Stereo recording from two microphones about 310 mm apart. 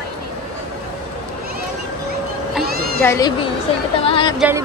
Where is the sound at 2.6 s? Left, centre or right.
Right.